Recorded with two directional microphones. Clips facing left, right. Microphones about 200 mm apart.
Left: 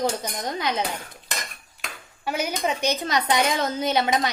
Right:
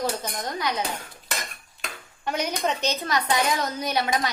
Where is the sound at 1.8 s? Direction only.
5° left (ahead or behind).